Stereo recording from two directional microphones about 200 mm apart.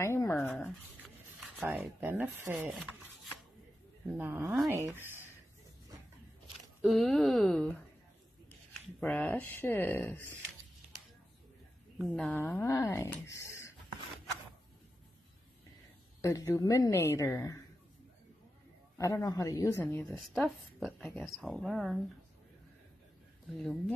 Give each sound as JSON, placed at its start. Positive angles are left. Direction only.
{"t": 0.0, "sound": "a woman's voice", "side_deg": 15}
{"t": 1.6, "sound": "a woman's voice", "side_deg": -10}
{"t": 6.8, "sound": "a woman's voice", "side_deg": 0}
{"t": 9.0, "sound": "speech", "side_deg": 5}
{"t": 12.0, "sound": "speech", "side_deg": 5}
{"t": 16.2, "sound": "speech", "side_deg": 15}
{"t": 18.9, "sound": "a woman's voice", "side_deg": 15}
{"t": 23.5, "sound": "a woman's voice", "side_deg": 0}